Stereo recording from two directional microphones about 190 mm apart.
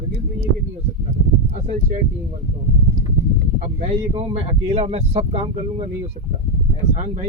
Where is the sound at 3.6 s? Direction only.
35° right (ahead or behind).